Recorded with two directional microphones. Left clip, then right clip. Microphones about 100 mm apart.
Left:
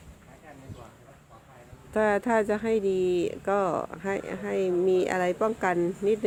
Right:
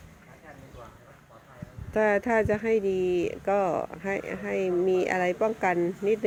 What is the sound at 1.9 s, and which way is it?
Speech, 15° left (ahead or behind).